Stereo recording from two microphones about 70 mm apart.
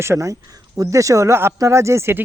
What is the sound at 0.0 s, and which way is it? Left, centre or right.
Speech, right.